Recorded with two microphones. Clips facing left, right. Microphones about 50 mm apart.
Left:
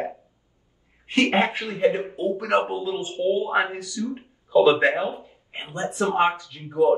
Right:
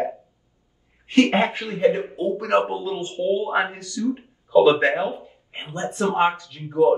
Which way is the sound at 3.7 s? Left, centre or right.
Centre.